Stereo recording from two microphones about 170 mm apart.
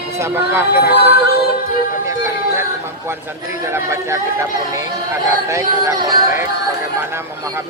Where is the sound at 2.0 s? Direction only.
15° right (ahead or behind).